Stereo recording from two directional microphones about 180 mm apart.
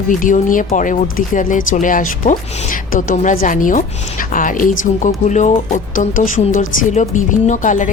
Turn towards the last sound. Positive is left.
turn(degrees=45)  # may be behind; listen again after turning